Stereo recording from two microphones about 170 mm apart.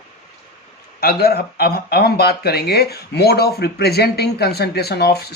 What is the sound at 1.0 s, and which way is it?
Speech, 65° left (ahead or behind).